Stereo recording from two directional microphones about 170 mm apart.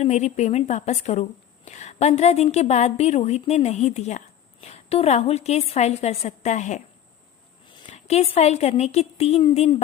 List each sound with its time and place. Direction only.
0.0 s a woman's voice: 40° left (ahead or behind)
7.9 s a woman's voice: 40° left (ahead or behind)